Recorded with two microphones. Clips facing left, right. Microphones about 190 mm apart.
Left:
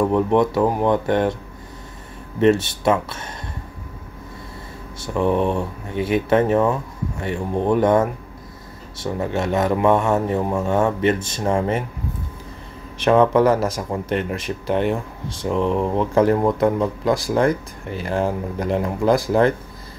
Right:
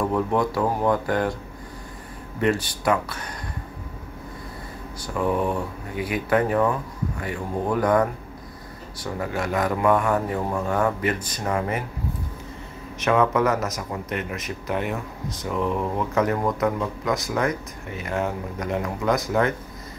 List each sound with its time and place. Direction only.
0.1 s speech: 20° left (ahead or behind)
2.4 s speech: 25° left (ahead or behind)
5.0 s speech: 25° left (ahead or behind)
12.9 s speech: 30° left (ahead or behind)